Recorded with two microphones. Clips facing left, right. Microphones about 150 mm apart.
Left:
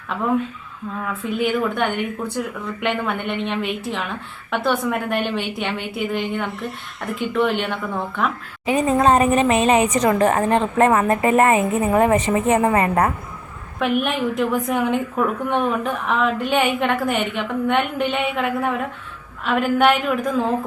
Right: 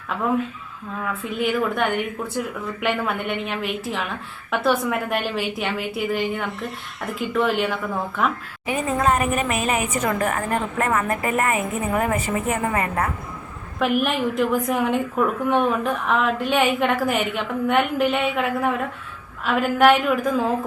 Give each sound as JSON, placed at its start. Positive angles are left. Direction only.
{"t": 1.0, "sound": "a woman's voice", "side_deg": 0}
{"t": 8.7, "sound": "a woman's voice", "side_deg": 35}
{"t": 12.7, "sound": "a woman's voice", "side_deg": 35}
{"t": 13.7, "sound": "a woman's voice", "side_deg": 0}